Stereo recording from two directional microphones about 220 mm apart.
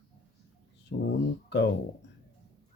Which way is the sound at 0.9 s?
45° left (ahead or behind).